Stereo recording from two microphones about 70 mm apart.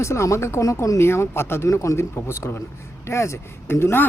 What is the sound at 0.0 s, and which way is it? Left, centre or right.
Speech, left.